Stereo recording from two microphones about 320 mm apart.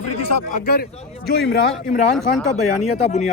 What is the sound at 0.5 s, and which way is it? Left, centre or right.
Speech, left.